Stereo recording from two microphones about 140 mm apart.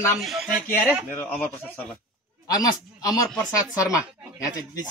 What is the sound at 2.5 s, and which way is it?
Speech, 30° left (ahead or behind).